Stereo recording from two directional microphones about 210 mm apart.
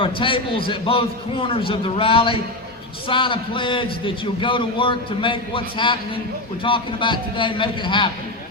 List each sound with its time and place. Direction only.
0.0 s a man's voice: 25° left (ahead or behind)